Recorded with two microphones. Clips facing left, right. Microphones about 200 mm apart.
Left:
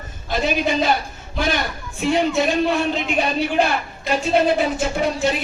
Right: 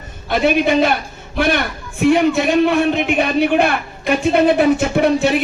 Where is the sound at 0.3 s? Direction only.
60° right (ahead or behind).